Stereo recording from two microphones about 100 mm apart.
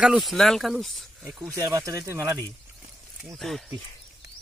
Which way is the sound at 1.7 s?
35° right (ahead or behind).